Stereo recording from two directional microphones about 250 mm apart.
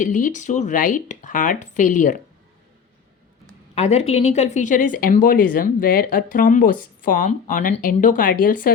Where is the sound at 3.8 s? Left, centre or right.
Left.